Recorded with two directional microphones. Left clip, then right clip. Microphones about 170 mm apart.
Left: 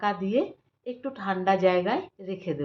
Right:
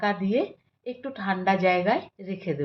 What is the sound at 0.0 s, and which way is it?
Speech, 20° right (ahead or behind).